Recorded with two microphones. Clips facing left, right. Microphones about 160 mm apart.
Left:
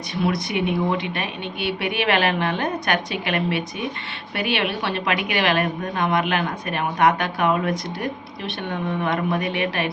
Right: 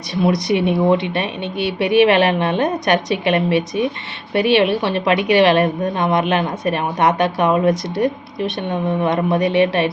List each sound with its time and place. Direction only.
0.2 s a woman's voice: 25° right (ahead or behind)